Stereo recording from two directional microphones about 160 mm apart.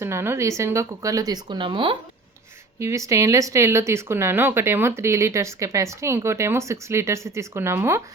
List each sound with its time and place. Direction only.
0.0 s speech: 15° right (ahead or behind); by 2.0 s 30° right (ahead or behind)
2.7 s speech: 20° right (ahead or behind)